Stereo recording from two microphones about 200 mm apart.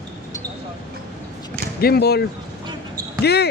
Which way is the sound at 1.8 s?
50° left (ahead or behind).